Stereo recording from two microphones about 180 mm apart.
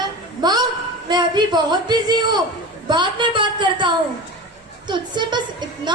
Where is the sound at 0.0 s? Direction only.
25° right (ahead or behind).